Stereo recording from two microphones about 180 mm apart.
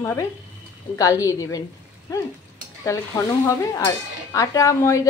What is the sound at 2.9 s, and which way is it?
Speech, 15° left (ahead or behind).